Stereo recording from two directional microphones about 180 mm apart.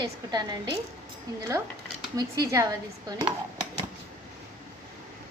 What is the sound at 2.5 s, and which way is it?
Speech, 15° right (ahead or behind).